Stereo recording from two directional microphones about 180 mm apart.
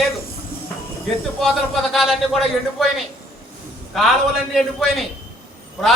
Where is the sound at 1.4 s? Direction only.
Centre (ahead or behind).